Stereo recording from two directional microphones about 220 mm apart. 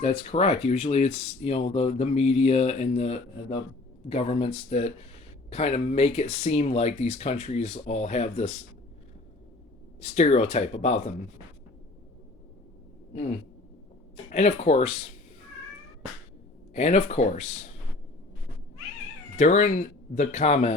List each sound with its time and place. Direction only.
0.0 s speech: 25° left (ahead or behind)
10.0 s speech: 30° left (ahead or behind)
14.3 s speech: 30° left (ahead or behind)
16.7 s speech: 30° left (ahead or behind)
19.4 s speech: 35° left (ahead or behind)